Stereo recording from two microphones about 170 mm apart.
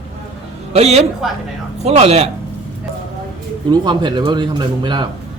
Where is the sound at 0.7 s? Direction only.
40° right (ahead or behind).